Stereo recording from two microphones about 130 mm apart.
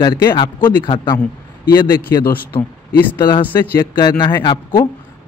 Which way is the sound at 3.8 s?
35° left (ahead or behind).